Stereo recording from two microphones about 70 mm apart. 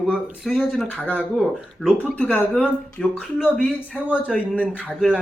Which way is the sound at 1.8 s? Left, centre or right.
Left.